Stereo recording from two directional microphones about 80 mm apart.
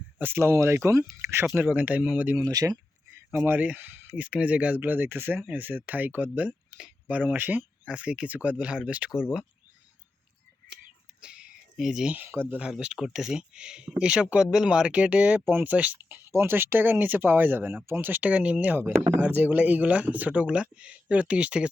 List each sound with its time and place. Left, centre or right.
0.2 s speech: right
2.4 s speech: right
3.3 s speech: right
11.2 s a sound: centre
12.1 s speech: right
12.5 s speech: centre